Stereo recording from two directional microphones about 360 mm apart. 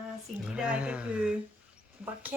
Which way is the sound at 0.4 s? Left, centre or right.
Centre.